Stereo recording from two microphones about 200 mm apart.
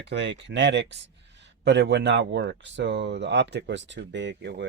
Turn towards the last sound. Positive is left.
turn(degrees=-60)  # may be behind; listen again after turning